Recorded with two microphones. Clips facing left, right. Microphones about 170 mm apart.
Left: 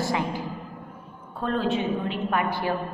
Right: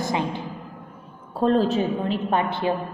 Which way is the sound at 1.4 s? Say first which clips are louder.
Right 5 dB; 35° right (ahead or behind).